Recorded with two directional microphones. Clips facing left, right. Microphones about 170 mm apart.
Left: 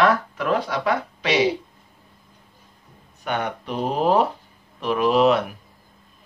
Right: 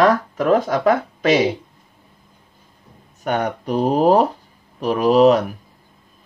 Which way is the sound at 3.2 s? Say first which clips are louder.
Right 5 dB; 40° right (ahead or behind).